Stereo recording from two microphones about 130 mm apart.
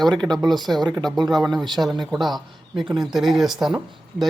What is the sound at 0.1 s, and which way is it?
Speech, 35° right (ahead or behind).